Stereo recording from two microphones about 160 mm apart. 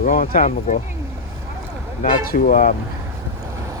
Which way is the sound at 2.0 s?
60° left (ahead or behind).